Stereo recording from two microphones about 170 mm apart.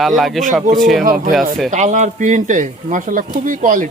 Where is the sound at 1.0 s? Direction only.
55° right (ahead or behind).